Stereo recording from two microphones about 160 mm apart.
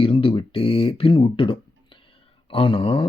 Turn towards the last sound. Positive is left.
turn(degrees=35)  # may be behind; listen again after turning